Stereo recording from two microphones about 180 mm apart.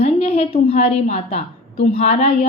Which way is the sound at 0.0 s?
35° left (ahead or behind).